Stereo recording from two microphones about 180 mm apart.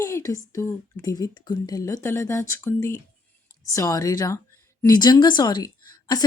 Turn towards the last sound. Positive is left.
turn(degrees=20)  # may be behind; listen again after turning